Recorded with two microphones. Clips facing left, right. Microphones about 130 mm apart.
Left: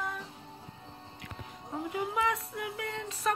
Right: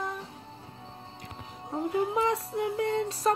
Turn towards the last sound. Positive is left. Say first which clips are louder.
# right 6 dB
turn(degrees=-35)  # may be behind; listen again after turning